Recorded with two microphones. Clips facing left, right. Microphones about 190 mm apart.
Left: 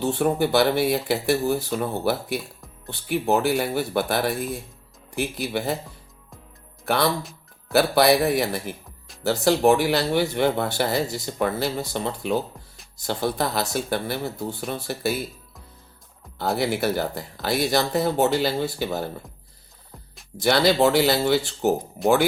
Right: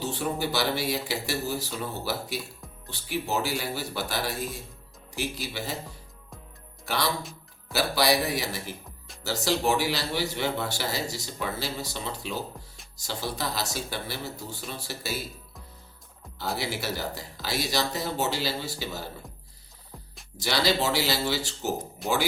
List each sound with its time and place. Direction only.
0.0 s speech: 55° left (ahead or behind)
6.8 s speech: 55° left (ahead or behind)
16.6 s speech: 55° left (ahead or behind)
20.3 s speech: 55° left (ahead or behind)